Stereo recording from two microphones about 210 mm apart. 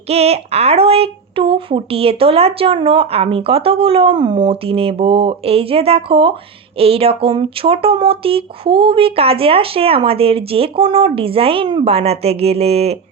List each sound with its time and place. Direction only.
0.1 s speech: 30° right (ahead or behind)